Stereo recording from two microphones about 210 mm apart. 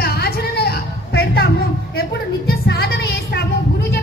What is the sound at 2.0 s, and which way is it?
Music, 45° left (ahead or behind).